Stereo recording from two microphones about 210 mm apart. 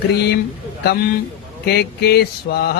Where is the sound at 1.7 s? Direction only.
50° left (ahead or behind).